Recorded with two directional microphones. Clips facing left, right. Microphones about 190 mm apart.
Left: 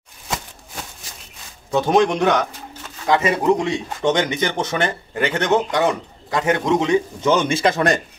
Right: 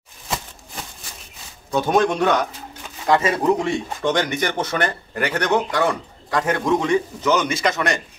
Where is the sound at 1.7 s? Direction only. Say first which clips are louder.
Left 2 dB; 20° left (ahead or behind).